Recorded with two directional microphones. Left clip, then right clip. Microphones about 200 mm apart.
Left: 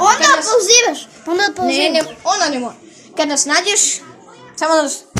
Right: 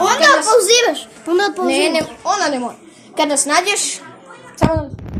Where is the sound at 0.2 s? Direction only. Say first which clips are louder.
Right 1 dB; centre (ahead or behind).